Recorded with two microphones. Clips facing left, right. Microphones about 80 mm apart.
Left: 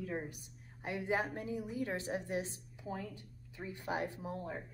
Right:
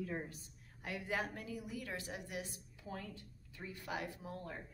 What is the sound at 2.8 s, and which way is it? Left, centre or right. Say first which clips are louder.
A woman's voice: left 4 dB; centre.